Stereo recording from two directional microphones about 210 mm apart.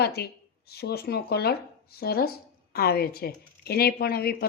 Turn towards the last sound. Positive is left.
turn(degrees=45)  # may be behind; listen again after turning